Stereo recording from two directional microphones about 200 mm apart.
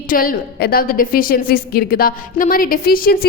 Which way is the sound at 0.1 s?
45° left (ahead or behind).